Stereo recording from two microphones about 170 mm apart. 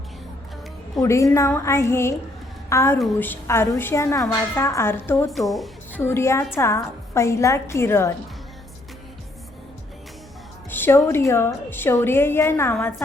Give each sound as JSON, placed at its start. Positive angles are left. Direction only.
{"t": 1.0, "sound": "a woman's voice", "side_deg": 15}
{"t": 5.3, "sound": "a woman's voice", "side_deg": 0}
{"t": 5.9, "sound": "a woman's voice", "side_deg": 15}
{"t": 10.7, "sound": "a woman's voice", "side_deg": 10}